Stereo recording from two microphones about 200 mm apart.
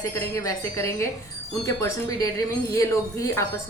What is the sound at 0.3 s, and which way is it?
A woman's voice, 15° left (ahead or behind).